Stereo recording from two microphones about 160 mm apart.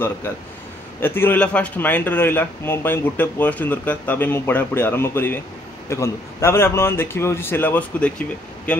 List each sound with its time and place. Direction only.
1.0 s a man's voice: 15° left (ahead or behind)